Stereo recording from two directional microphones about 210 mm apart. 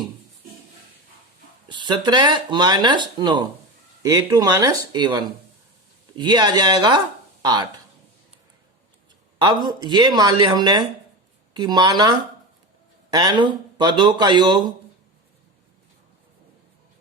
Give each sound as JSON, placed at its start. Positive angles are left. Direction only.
{"t": 1.6, "sound": "speech", "side_deg": -20}
{"t": 9.4, "sound": "speech", "side_deg": -20}